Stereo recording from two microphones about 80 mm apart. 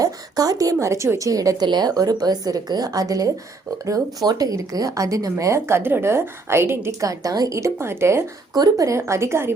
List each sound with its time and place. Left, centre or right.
0.0 s a woman's voice: right
1.6 s a woman's voice: right
8.5 s speech: right
8.9 s a woman's voice: right